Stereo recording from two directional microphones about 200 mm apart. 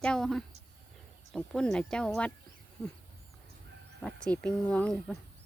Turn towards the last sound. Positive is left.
turn(degrees=5)  # may be behind; listen again after turning